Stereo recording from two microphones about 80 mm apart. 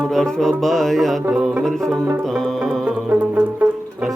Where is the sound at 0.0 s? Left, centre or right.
Centre.